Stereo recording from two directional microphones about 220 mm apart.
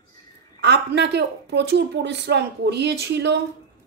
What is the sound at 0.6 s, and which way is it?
A woman's voice, 50° right (ahead or behind).